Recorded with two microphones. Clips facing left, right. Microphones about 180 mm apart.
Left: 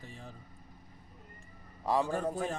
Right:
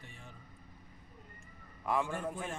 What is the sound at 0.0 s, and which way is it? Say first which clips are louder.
Vehicle: left 6 dB; 35° left (ahead or behind).